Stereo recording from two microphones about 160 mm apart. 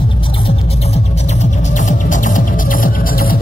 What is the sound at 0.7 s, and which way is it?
Music, 45° left (ahead or behind).